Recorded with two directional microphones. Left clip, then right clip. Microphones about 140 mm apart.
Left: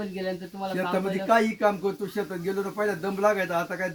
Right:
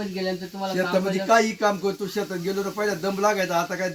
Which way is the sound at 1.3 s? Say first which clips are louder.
Right 2 dB; 10° left (ahead or behind).